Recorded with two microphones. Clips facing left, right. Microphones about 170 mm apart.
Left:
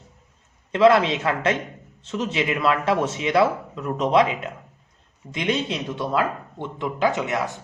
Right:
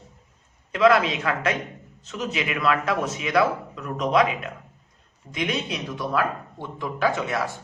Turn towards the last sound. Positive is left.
turn(degrees=20)  # may be behind; listen again after turning